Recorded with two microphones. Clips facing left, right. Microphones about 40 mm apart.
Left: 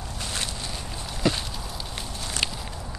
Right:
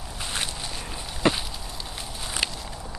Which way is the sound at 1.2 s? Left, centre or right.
Right.